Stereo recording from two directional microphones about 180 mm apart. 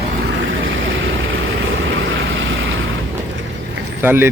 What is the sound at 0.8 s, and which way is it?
Vehicle, 90° right.